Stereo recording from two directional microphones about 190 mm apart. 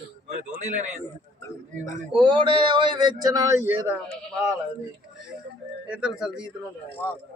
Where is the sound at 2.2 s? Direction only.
25° right (ahead or behind).